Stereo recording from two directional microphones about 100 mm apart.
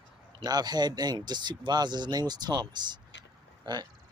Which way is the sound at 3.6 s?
45° right (ahead or behind).